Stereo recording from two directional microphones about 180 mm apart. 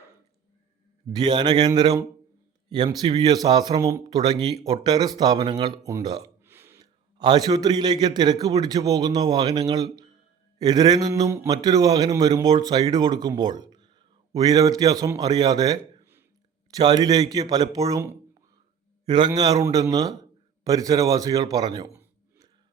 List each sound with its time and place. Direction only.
1.1 s speech: 25° right (ahead or behind)
6.4 s burping: 15° right (ahead or behind)
7.2 s speech: 25° right (ahead or behind)
13.7 s a sound: 25° right (ahead or behind)
14.3 s a man's voice: 20° right (ahead or behind)